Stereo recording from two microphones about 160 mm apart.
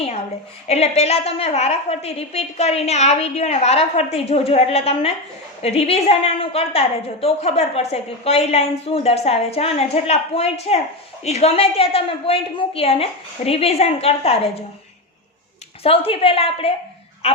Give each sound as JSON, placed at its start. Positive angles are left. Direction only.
{"t": 0.7, "sound": "a woman's voice", "side_deg": 40}
{"t": 15.8, "sound": "a woman's voice", "side_deg": 35}